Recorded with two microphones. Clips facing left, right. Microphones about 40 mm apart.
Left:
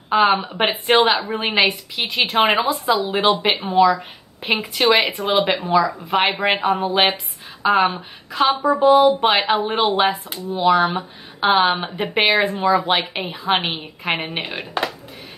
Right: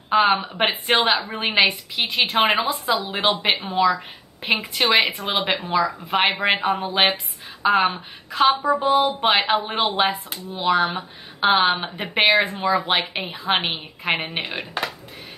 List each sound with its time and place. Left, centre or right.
0.1 s a woman's voice: centre